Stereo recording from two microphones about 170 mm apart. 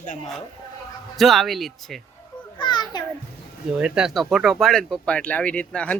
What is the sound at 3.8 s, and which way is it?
Speech, 5° right (ahead or behind).